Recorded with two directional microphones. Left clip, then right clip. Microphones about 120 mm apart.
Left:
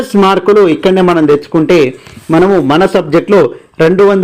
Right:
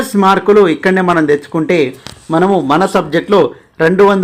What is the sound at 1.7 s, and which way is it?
Speech, 40° left (ahead or behind).